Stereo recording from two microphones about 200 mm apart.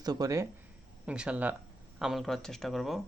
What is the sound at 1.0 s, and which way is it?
Speech, 5° right (ahead or behind).